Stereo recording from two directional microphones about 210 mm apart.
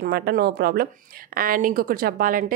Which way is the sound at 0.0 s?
45° right (ahead or behind).